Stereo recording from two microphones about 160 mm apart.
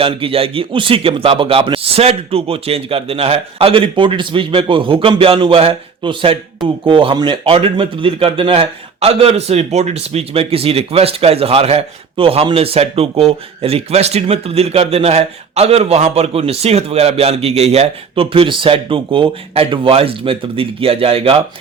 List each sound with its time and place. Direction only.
0.0 s speech: 35° right (ahead or behind)